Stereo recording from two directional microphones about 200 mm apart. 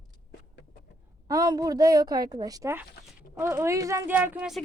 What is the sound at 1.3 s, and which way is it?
A woman's voice, 20° right (ahead or behind).